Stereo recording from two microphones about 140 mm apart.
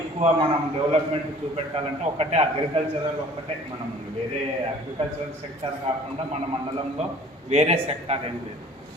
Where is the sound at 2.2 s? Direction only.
50° right (ahead or behind).